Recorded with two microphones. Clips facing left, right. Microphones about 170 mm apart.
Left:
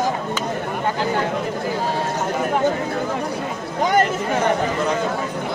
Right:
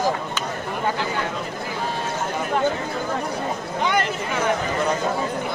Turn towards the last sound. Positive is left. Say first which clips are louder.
# left 5 dB
turn(degrees=45)  # may be behind; listen again after turning